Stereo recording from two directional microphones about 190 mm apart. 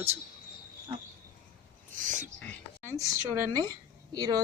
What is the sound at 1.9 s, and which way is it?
Speech, 45° right (ahead or behind).